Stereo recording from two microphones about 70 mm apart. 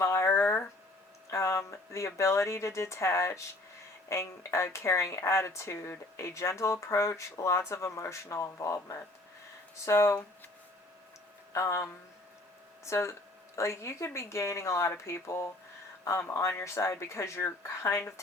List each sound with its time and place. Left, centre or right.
0.0 s a sound: left
1.3 s speech: left
11.5 s speech: left